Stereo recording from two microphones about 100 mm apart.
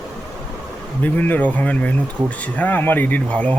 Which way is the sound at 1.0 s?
15° left (ahead or behind).